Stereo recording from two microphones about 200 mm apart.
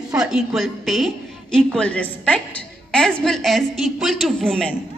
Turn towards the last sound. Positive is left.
turn(degrees=5)  # may be behind; listen again after turning